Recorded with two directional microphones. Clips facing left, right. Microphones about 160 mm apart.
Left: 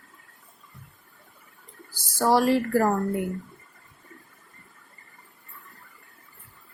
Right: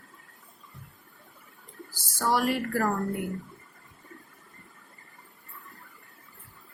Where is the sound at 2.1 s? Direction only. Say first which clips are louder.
Left 6 dB; 35° left (ahead or behind).